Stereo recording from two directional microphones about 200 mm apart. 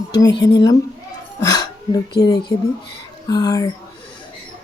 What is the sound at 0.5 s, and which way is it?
Speech, 20° left (ahead or behind).